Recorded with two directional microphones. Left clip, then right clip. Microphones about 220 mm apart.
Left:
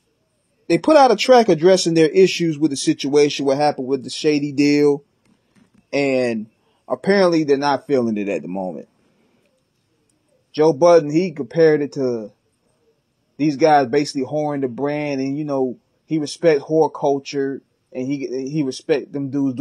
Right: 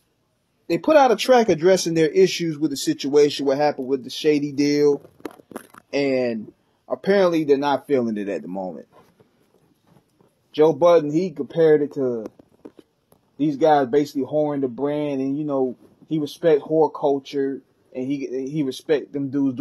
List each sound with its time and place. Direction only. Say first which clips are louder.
0.7 s speech: left 3 dB; 20° left (ahead or behind)
10.5 s speech: left 2 dB; 15° left (ahead or behind)
13.4 s speech: left 3 dB; 15° left (ahead or behind)